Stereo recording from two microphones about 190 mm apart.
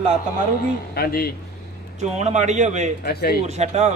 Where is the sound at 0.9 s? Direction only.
55° left (ahead or behind).